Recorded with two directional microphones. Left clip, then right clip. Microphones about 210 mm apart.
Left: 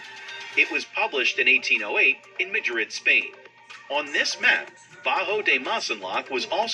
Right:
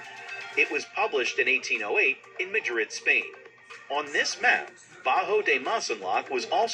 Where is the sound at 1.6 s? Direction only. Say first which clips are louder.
Left 6 dB; 5° right (ahead or behind).